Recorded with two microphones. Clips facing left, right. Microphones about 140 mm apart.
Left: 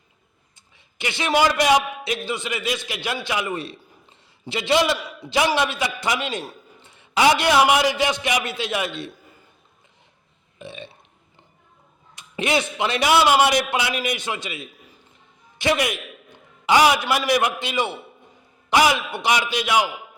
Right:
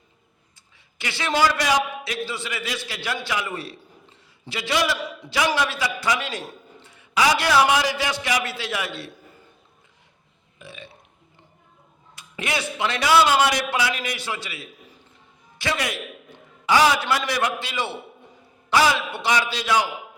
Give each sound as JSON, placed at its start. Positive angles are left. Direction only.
{"t": 0.9, "sound": "a man's voice", "side_deg": 20}
{"t": 10.6, "sound": "burping", "side_deg": 25}
{"t": 12.1, "sound": "a man's voice", "side_deg": 20}